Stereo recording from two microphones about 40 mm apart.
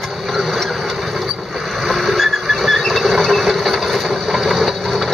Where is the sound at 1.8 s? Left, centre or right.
Centre.